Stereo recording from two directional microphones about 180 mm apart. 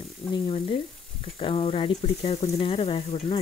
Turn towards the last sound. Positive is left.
turn(degrees=30)  # may be behind; listen again after turning